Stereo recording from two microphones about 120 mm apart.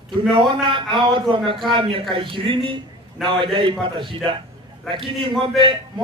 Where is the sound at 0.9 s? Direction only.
40° right (ahead or behind).